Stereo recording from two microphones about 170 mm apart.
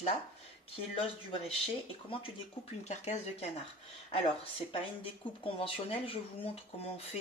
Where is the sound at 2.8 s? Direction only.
40° left (ahead or behind).